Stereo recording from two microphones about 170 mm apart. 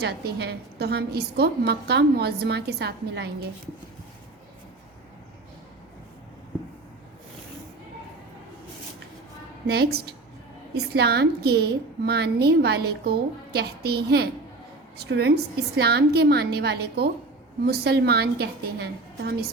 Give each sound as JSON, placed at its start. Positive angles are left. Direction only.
{"t": 0.0, "sound": "a woman's voice", "side_deg": -75}
{"t": 9.6, "sound": "a woman's voice", "side_deg": -70}